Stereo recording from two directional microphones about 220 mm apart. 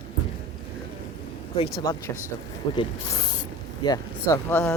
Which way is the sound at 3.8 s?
15° left (ahead or behind).